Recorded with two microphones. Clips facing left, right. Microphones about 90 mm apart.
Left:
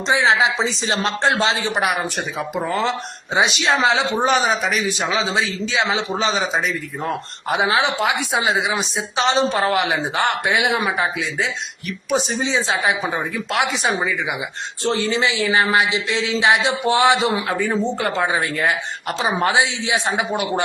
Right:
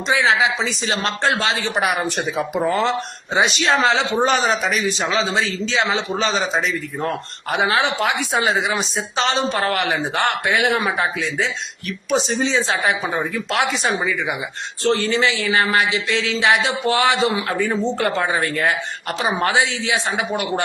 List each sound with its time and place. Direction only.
0.1 s speech: 25° left (ahead or behind)
1.7 s speech: centre (ahead or behind)
3.3 s a man's voice: 10° left (ahead or behind)
6.1 s a man's voice: 15° left (ahead or behind)
7.5 s a man's voice: 10° left (ahead or behind)
12.1 s a man's voice: 10° left (ahead or behind)
12.8 s speech: 5° left (ahead or behind)
14.8 s a man's voice: 15° left (ahead or behind)